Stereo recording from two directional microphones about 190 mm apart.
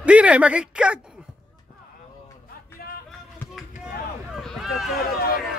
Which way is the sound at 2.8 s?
55° left (ahead or behind).